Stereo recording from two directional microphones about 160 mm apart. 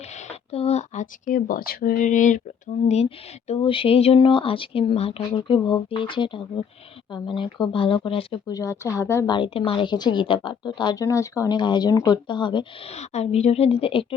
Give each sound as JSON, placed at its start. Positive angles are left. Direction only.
{"t": 0.1, "sound": "speech", "side_deg": 45}
{"t": 8.4, "sound": "a woman's voice", "side_deg": 20}
{"t": 9.3, "sound": "a woman's voice", "side_deg": 35}